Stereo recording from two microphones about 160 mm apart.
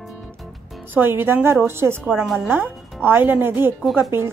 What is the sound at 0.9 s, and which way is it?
A woman's voice, 15° right (ahead or behind).